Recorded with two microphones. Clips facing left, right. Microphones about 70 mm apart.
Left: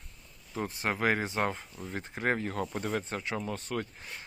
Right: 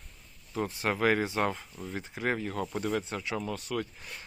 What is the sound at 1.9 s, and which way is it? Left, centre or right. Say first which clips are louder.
Speech: left 1 dB; left.